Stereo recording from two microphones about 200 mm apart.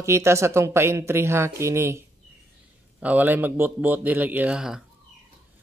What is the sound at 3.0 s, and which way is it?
Speech, 10° right (ahead or behind).